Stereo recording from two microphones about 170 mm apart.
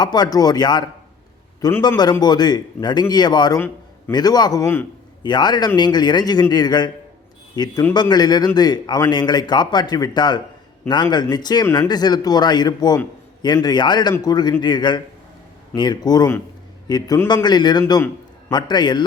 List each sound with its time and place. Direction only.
0.0 s a man's voice: 25° left (ahead or behind)
5.2 s a man's voice: 25° left (ahead or behind)